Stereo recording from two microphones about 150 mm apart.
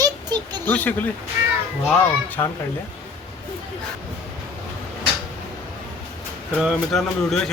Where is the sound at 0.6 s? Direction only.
10° left (ahead or behind).